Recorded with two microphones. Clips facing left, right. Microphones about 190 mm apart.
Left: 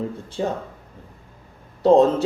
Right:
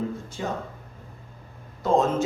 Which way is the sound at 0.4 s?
30° left (ahead or behind).